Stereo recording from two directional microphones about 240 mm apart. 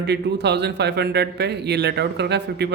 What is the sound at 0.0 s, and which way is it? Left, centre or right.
A man's voice, right.